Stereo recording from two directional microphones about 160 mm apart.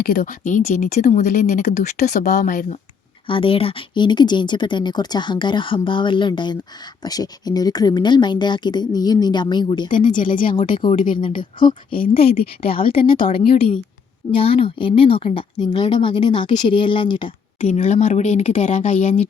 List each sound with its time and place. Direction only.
0.0 s speech: 70° left (ahead or behind)
3.2 s speech: 35° left (ahead or behind)
10.1 s speech: 55° left (ahead or behind)
10.5 s a woman's voice: 30° left (ahead or behind)
13.4 s a woman's voice: 65° left (ahead or behind)
14.3 s a woman's voice: 35° left (ahead or behind)
17.6 s speech: 45° left (ahead or behind)